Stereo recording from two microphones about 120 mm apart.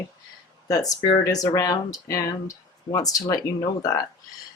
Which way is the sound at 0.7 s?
30° left (ahead or behind).